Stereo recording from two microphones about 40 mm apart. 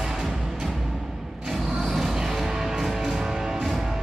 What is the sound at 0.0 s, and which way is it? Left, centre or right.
Music, centre.